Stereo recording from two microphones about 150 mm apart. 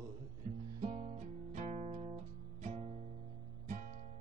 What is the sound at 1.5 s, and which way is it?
Music, 50° right (ahead or behind).